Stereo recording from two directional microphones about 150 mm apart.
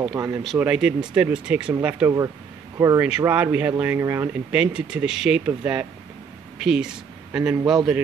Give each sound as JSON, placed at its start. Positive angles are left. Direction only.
{"t": 0.0, "sound": "speech", "side_deg": -25}
{"t": 0.6, "sound": "a man's voice", "side_deg": -5}